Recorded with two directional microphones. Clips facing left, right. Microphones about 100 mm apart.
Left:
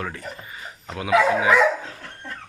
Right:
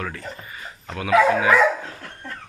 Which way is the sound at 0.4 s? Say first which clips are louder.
Right 1 dB; 20° left (ahead or behind).